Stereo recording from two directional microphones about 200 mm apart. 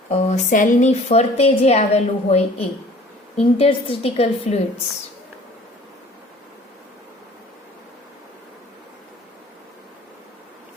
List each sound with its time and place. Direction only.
0.1 s a woman's voice: 35° left (ahead or behind)